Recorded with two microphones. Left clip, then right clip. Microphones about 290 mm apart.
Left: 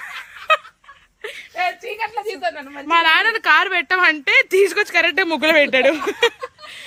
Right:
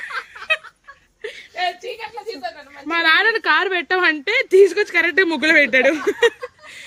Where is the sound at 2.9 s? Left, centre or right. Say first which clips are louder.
Left 1 dB; centre.